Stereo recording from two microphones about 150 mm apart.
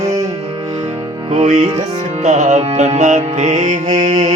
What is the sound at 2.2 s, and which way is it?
Music, 50° right (ahead or behind).